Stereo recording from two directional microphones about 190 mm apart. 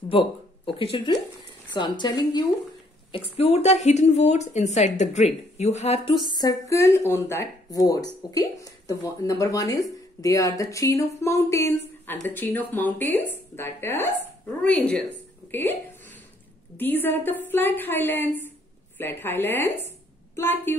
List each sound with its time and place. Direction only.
0.7 s speech: 30° left (ahead or behind); by 15.0 s 5° left (ahead or behind)
16.7 s speech: 10° left (ahead or behind)